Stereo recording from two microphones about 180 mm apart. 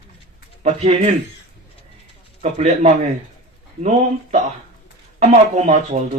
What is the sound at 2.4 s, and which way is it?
Speech, 40° right (ahead or behind).